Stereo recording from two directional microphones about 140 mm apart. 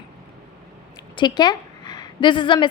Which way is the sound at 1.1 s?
30° left (ahead or behind).